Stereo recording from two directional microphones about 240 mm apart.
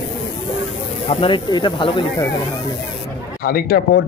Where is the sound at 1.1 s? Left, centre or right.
Left.